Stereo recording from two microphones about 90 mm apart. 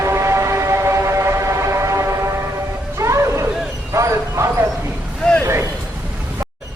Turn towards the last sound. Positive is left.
turn(degrees=10)  # may be behind; listen again after turning